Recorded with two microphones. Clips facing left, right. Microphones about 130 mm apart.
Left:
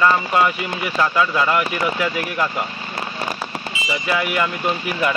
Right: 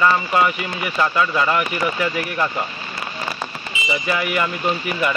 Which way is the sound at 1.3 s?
10° left (ahead or behind).